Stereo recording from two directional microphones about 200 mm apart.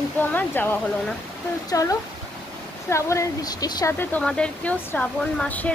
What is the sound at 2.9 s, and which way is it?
A woman's voice, 15° left (ahead or behind).